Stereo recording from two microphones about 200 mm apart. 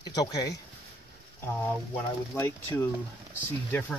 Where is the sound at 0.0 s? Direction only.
20° left (ahead or behind).